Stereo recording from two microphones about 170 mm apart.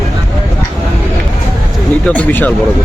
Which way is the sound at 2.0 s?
10° left (ahead or behind).